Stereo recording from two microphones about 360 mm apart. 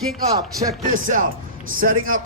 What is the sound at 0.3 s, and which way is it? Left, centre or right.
A man's voice, right.